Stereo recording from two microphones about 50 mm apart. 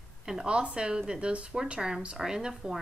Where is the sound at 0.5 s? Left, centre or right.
Centre.